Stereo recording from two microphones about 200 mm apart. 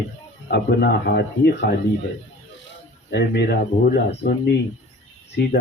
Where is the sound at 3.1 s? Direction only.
55° left (ahead or behind).